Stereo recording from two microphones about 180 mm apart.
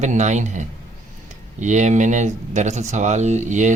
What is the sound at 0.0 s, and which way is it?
A man's voice, 40° right (ahead or behind).